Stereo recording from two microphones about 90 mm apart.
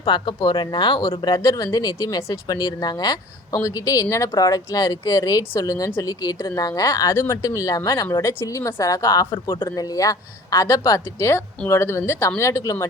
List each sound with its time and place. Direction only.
0.0 s speech: 60° left (ahead or behind)
1.4 s speech: 40° left (ahead or behind)
9.3 s speech: 30° left (ahead or behind)
9.7 s speech: 40° left (ahead or behind)